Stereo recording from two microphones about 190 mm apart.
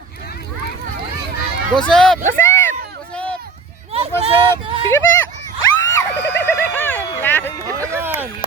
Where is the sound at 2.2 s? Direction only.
15° left (ahead or behind).